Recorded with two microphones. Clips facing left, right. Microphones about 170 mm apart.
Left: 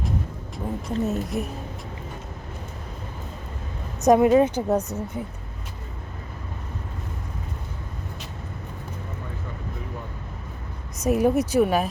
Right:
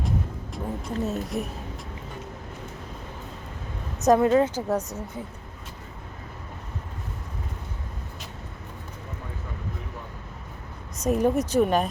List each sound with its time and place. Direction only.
0.5 s speech: centre (ahead or behind)
4.0 s speech: 15° left (ahead or behind)
11.0 s speech: 10° left (ahead or behind)